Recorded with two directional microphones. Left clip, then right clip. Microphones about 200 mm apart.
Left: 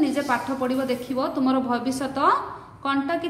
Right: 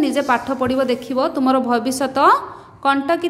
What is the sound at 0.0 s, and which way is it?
A woman's voice, 40° right (ahead or behind).